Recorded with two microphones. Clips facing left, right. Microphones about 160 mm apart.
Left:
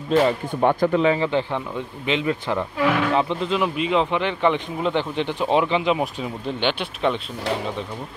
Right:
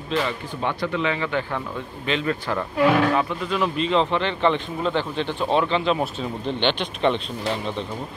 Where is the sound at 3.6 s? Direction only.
10° left (ahead or behind).